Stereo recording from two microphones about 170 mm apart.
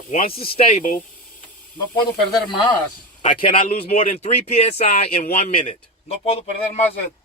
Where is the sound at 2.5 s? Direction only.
25° left (ahead or behind).